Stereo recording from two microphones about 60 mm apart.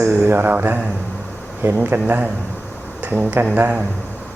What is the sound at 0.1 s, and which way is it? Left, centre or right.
Mantra, right.